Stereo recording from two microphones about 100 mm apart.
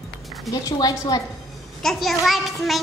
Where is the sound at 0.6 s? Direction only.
40° left (ahead or behind).